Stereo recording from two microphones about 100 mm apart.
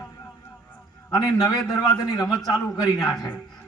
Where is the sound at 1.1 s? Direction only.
35° left (ahead or behind).